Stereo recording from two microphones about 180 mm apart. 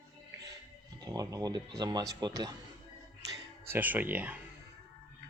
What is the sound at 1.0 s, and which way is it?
Speech, 20° right (ahead or behind).